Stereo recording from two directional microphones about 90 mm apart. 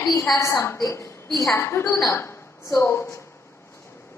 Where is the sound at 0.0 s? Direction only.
35° left (ahead or behind).